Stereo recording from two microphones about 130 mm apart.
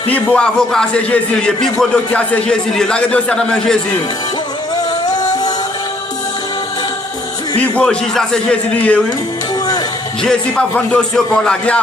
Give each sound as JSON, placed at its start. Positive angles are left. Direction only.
{"t": 0.1, "sound": "speech", "side_deg": 10}
{"t": 5.2, "sound": "music", "side_deg": 30}
{"t": 7.6, "sound": "speech", "side_deg": 5}
{"t": 10.2, "sound": "speech", "side_deg": 10}